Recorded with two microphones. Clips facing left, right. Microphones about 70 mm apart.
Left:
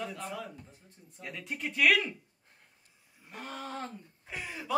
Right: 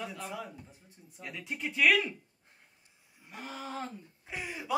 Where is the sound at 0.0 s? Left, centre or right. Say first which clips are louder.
Left 1 dB; centre.